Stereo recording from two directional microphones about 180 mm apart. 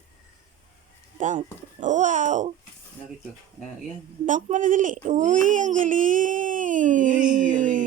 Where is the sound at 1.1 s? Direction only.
45° right (ahead or behind).